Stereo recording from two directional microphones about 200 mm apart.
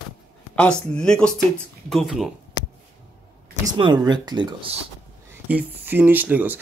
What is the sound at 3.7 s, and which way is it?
Speech, 20° right (ahead or behind).